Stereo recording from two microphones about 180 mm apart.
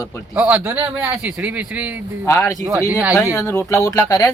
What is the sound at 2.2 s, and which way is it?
Speech, 15° left (ahead or behind).